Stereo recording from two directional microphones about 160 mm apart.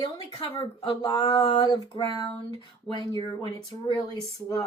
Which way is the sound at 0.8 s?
30° left (ahead or behind).